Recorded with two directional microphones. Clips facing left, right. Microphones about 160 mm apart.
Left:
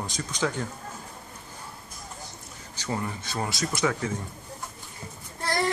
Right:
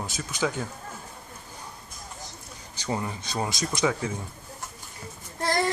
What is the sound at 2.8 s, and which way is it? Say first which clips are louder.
Speech: right 1 dB; 15° right (ahead or behind).